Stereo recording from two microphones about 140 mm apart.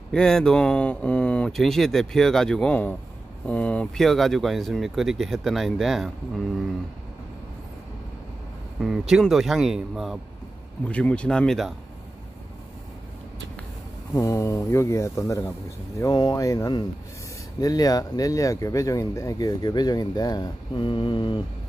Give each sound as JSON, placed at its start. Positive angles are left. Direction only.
{"t": 0.1, "sound": "speech", "side_deg": 5}
{"t": 8.8, "sound": "speech", "side_deg": -5}
{"t": 10.8, "sound": "speech", "side_deg": 10}
{"t": 14.1, "sound": "speech", "side_deg": 20}